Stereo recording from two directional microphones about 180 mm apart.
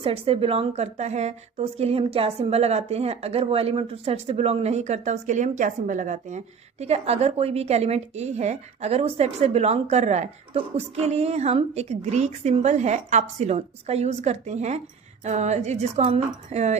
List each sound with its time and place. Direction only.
0.0 s a woman's voice: 30° right (ahead or behind)